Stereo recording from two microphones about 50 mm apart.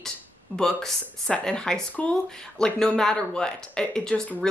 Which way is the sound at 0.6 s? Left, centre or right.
Centre.